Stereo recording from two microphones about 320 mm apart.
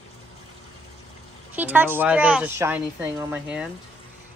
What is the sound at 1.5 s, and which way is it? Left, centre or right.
Speech, centre.